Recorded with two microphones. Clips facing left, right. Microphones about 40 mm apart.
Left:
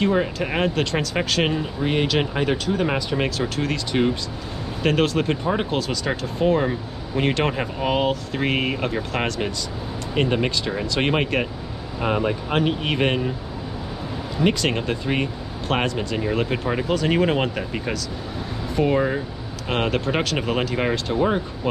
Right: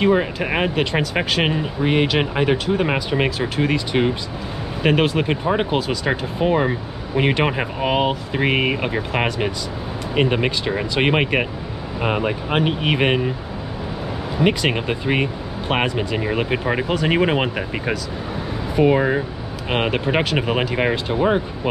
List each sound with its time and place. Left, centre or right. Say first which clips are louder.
0.0 s speech: right 3 dB; centre
14.4 s speech: right 2 dB; centre